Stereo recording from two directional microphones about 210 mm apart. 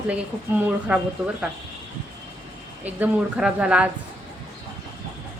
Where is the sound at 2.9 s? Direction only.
5° right (ahead or behind).